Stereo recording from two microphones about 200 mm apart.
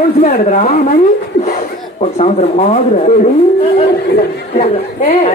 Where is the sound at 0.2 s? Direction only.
35° left (ahead or behind).